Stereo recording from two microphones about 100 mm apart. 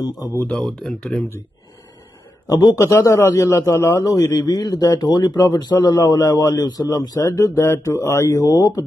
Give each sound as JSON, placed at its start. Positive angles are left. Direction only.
{"t": 0.4, "sound": "speech", "side_deg": 15}
{"t": 2.4, "sound": "a man's voice", "side_deg": 35}
{"t": 7.2, "sound": "speech", "side_deg": 30}